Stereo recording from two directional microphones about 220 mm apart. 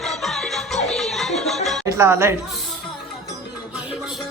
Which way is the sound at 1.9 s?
10° right (ahead or behind).